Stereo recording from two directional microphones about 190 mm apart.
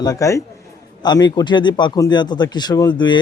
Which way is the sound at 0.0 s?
15° left (ahead or behind).